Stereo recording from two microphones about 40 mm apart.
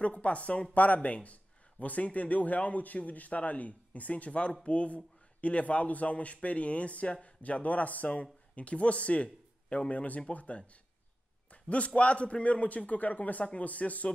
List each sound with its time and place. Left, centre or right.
0.0 s a man's voice: left